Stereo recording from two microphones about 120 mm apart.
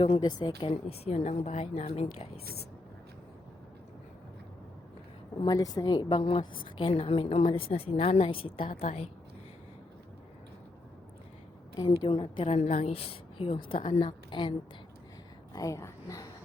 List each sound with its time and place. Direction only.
0.2 s a woman's voice: 35° left (ahead or behind)
0.9 s speech: 60° left (ahead or behind)
5.5 s a woman's voice: 30° left (ahead or behind)
6.2 s a woman's voice: 50° left (ahead or behind)
11.8 s a woman's voice: 45° left (ahead or behind)
12.5 s a woman's voice: 65° left (ahead or behind); by 14.5 s 40° left (ahead or behind)
15.5 s a woman's voice: 30° left (ahead or behind)